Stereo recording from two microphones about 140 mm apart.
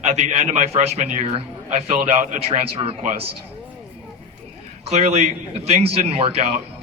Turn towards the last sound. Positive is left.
turn(degrees=-45)  # may be behind; listen again after turning